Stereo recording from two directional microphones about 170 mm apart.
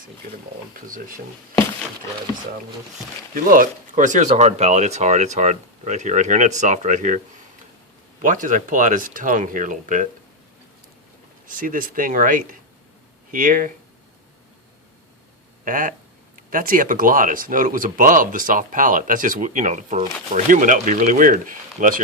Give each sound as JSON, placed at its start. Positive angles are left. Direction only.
{"t": 0.9, "sound": "speech", "side_deg": -50}
{"t": 3.3, "sound": "speech", "side_deg": -55}
{"t": 8.2, "sound": "speech", "side_deg": -50}
{"t": 11.4, "sound": "speech", "side_deg": -50}
{"t": 15.6, "sound": "speech", "side_deg": -50}